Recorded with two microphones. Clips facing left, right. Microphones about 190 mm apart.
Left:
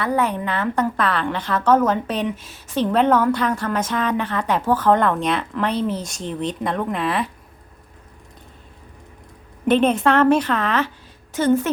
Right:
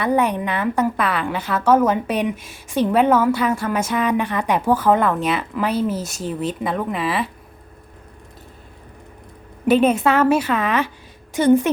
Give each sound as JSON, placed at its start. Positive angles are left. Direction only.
{"t": 0.0, "sound": "a woman's voice", "side_deg": -15}
{"t": 9.6, "sound": "a woman's voice", "side_deg": -5}